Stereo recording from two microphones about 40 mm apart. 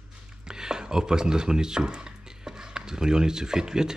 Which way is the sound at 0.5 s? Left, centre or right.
Centre.